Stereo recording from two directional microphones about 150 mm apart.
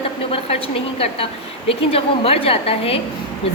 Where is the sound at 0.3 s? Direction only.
40° left (ahead or behind).